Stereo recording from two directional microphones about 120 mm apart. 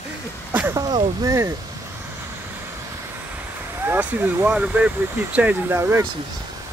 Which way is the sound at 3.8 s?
15° right (ahead or behind).